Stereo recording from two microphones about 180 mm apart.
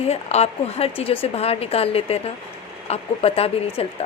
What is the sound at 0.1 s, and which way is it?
A woman's voice, 35° left (ahead or behind).